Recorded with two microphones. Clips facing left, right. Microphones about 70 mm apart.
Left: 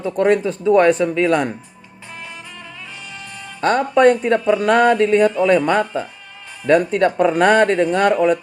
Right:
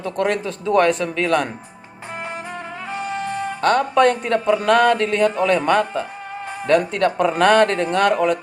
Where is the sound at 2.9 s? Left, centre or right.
Right.